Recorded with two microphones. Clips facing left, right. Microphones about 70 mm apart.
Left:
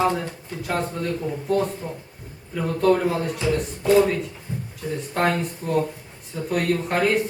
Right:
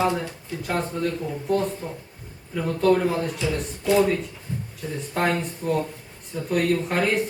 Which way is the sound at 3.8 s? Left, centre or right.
Left.